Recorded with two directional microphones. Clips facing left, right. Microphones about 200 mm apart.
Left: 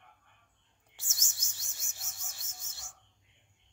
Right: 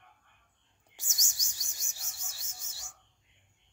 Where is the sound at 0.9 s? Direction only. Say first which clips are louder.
Right 1 dB; 15° right (ahead or behind).